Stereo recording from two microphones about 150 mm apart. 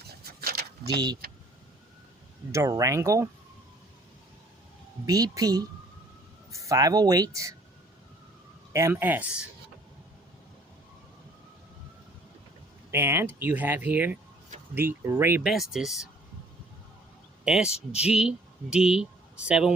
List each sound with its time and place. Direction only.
0.0 s a sound: 90° right
0.9 s speech: 30° right (ahead or behind)
2.5 s speech: 20° right (ahead or behind)
5.0 s speech: 25° right (ahead or behind)
8.7 s speech: 15° right (ahead or behind)
12.9 s speech: 15° right (ahead or behind)
15.4 s speech: centre (ahead or behind)
17.4 s a man's voice: 5° right (ahead or behind)